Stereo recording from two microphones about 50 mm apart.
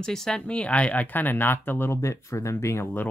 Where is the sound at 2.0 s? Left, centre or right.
Left.